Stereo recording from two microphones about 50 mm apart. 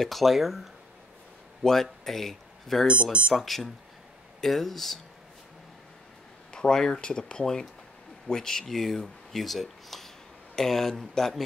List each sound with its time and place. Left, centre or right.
0.0 s speech: centre
2.9 s speech: right
3.3 s speech: centre
6.5 s speech: centre